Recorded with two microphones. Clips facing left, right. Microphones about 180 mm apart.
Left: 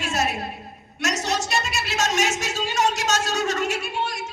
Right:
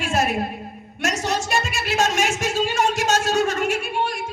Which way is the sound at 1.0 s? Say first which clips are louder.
Right 1 dB; 50° right (ahead or behind).